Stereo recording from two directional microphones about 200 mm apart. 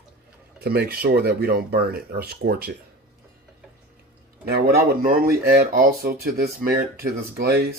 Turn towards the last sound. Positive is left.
turn(degrees=-50)  # may be behind; listen again after turning